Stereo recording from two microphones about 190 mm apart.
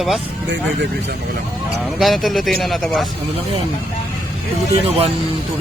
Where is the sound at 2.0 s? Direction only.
Centre (ahead or behind).